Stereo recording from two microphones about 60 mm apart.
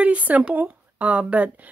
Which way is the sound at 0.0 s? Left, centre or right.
Right.